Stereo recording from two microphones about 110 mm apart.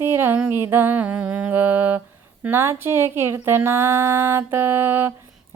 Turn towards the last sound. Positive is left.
turn(degrees=-20)  # may be behind; listen again after turning